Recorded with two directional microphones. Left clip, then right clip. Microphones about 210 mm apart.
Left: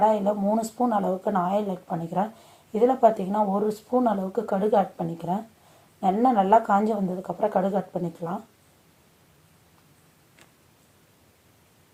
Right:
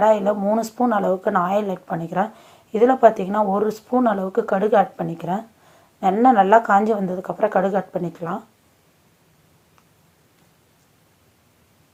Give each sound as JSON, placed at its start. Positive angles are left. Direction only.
{"t": 0.0, "sound": "speech", "side_deg": -20}
{"t": 7.1, "sound": "a woman's voice", "side_deg": -35}
{"t": 7.3, "sound": "speech", "side_deg": -20}